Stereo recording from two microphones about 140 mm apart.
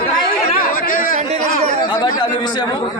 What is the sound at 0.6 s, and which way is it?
Chatter, 85° left.